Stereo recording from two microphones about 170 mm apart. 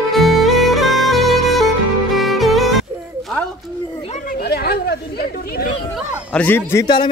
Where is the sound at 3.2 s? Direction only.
Centre (ahead or behind).